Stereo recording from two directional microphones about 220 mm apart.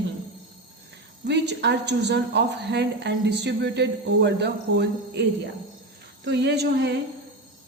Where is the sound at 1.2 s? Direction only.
50° right (ahead or behind).